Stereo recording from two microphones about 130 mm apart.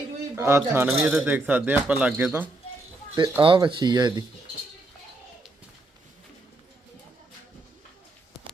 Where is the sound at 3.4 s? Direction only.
40° right (ahead or behind).